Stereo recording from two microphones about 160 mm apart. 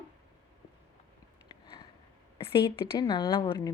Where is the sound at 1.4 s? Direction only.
25° left (ahead or behind).